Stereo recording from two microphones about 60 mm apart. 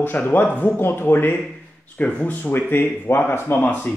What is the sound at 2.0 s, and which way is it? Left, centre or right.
Speech, left.